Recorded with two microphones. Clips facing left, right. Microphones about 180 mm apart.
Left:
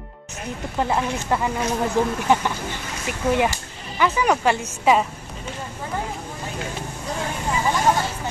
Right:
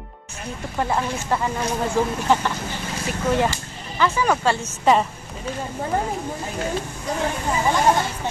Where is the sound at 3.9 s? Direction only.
20° left (ahead or behind).